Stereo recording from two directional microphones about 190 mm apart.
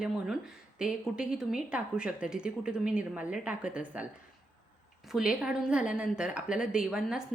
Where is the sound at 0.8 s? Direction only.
5° right (ahead or behind).